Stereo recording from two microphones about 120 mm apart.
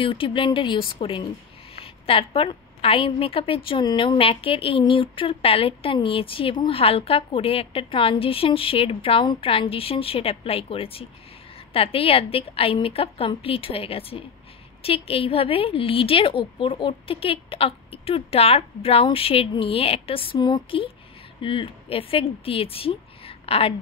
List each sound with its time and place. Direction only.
0.0 s a woman's voice: 45° left (ahead or behind)
20.3 s a woman's voice: 35° left (ahead or behind); by 23.7 s 50° left (ahead or behind)